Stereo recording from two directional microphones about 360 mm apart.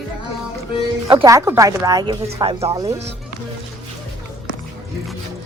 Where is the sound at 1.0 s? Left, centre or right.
Centre.